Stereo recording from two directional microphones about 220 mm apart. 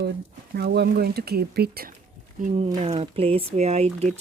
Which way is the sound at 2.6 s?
25° right (ahead or behind).